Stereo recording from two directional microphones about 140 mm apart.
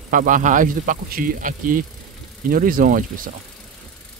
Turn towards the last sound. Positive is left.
turn(degrees=-75)  # may be behind; listen again after turning